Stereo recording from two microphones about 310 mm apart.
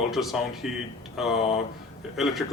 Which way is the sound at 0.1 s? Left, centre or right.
Centre.